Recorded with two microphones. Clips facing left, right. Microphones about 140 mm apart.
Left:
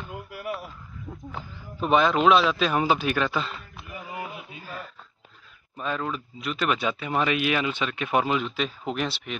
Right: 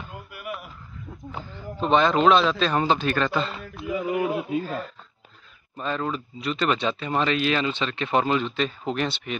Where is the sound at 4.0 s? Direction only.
85° right.